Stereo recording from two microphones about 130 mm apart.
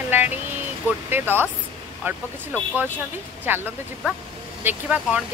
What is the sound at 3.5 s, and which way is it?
Speech, 15° right (ahead or behind).